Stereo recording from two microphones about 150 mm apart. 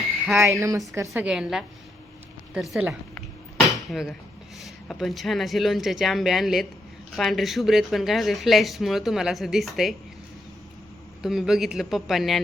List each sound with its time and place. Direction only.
0.4 s a woman's voice: 20° right (ahead or behind)
1.1 s speech: 5° right (ahead or behind)
11.2 s speech: 5° right (ahead or behind)